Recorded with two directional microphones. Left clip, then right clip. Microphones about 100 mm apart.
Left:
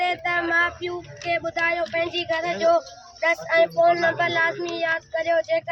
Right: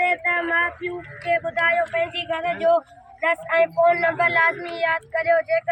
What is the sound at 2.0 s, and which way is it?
Speech, 65° left (ahead or behind).